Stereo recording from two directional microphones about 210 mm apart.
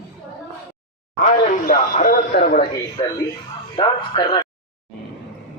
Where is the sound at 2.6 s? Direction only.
20° left (ahead or behind).